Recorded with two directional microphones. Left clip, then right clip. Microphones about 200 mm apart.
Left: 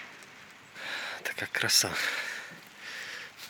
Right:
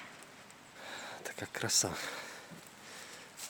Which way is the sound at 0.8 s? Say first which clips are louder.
Left 9 dB; centre (ahead or behind).